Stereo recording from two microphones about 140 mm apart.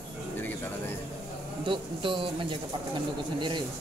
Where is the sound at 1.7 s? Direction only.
35° right (ahead or behind).